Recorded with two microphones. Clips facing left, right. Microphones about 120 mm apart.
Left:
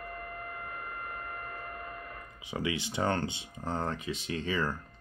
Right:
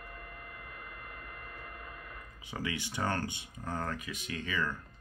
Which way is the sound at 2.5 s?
20° left (ahead or behind).